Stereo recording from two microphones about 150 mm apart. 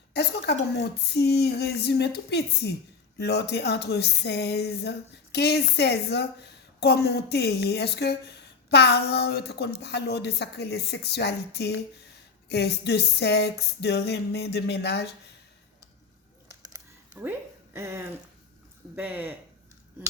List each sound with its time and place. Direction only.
0.1 s a woman's voice: 90° left
17.7 s speech: 15° right (ahead or behind)